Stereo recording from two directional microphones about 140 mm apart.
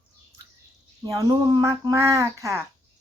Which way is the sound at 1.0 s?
25° right (ahead or behind).